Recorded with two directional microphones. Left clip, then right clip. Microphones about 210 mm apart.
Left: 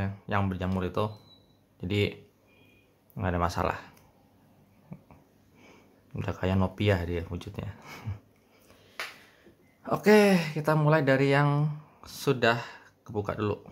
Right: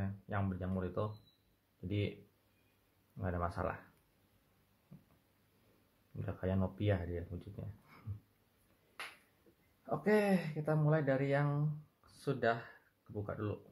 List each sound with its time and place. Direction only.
0.0 s speech: 25° left (ahead or behind)
3.2 s speech: 25° left (ahead or behind)
6.1 s speech: 25° left (ahead or behind)
9.8 s speech: 25° left (ahead or behind)